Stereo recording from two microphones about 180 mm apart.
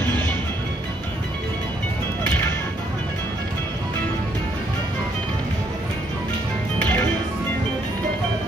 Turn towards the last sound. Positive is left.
turn(degrees=10)  # may be behind; listen again after turning